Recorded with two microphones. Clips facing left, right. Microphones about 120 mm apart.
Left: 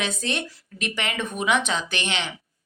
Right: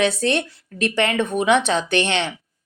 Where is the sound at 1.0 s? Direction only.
35° right (ahead or behind).